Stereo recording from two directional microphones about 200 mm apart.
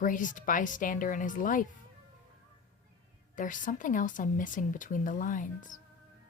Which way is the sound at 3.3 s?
40° left (ahead or behind).